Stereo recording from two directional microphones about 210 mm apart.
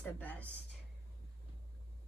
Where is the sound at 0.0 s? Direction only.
5° left (ahead or behind).